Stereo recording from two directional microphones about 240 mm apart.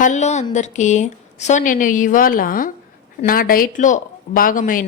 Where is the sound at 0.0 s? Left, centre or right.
Left.